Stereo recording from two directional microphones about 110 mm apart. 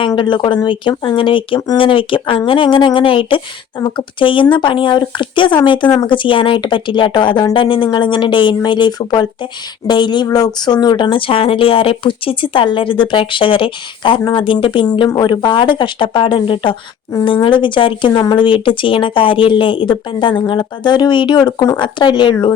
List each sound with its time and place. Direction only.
0.2 s speech: 50° left (ahead or behind)
14.8 s speech: 40° left (ahead or behind)